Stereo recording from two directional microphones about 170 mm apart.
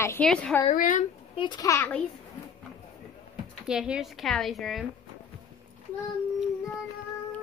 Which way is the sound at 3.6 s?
5° right (ahead or behind).